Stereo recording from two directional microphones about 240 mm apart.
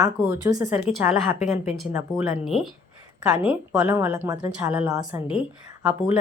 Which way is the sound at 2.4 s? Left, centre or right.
Centre.